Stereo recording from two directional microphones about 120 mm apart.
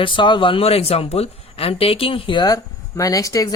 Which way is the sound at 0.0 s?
40° left (ahead or behind).